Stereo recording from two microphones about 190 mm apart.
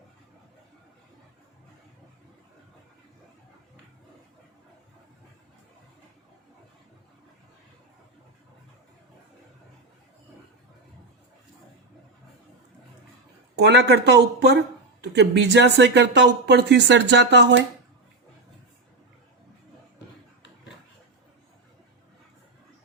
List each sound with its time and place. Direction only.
13.6 s speech: 65° right (ahead or behind)